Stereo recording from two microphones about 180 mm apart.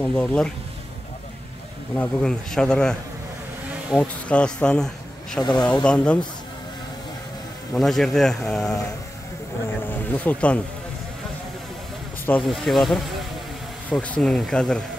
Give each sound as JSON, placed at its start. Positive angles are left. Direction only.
{"t": 0.0, "sound": "speech", "side_deg": 5}
{"t": 2.0, "sound": "speech", "side_deg": 5}
{"t": 5.4, "sound": "speech", "side_deg": 25}
{"t": 5.9, "sound": "speech", "side_deg": 5}
{"t": 7.7, "sound": "speech", "side_deg": 0}
{"t": 9.8, "sound": "speech", "side_deg": 10}
{"t": 12.3, "sound": "speech", "side_deg": 5}